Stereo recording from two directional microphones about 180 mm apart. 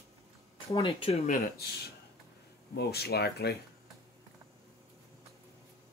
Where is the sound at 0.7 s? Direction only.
30° left (ahead or behind).